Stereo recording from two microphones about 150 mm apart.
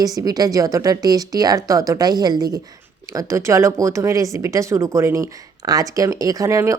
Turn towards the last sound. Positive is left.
turn(degrees=-20)  # may be behind; listen again after turning